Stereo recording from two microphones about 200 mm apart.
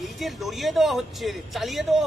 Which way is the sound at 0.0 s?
Centre (ahead or behind).